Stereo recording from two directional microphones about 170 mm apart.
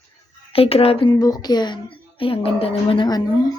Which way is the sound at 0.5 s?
35° left (ahead or behind).